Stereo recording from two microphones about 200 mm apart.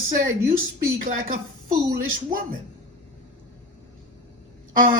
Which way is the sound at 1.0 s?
40° right (ahead or behind).